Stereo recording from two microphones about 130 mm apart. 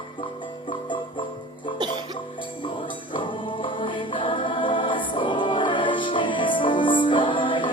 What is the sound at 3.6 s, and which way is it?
Music, 40° left (ahead or behind).